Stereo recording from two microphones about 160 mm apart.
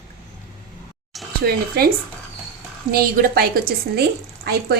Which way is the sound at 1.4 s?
70° right (ahead or behind).